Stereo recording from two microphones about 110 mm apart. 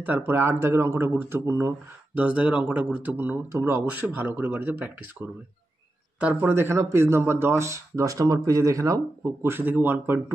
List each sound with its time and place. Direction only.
0.0 s speech: 15° right (ahead or behind)
2.1 s speech: 10° right (ahead or behind)
6.1 s speech: 15° right (ahead or behind)